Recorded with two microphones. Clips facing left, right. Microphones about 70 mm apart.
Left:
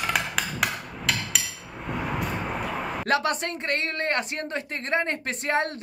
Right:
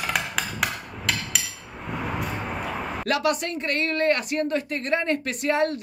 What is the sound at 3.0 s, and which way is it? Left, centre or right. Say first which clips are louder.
Speech: right 1 dB; left.